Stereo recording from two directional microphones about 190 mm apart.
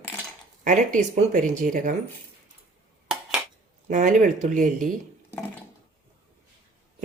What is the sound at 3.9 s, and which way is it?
Speech, 40° right (ahead or behind).